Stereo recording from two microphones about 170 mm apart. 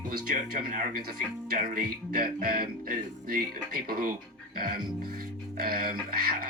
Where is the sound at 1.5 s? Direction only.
60° right (ahead or behind).